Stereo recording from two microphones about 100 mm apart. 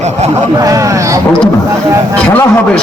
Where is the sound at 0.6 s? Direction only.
35° right (ahead or behind).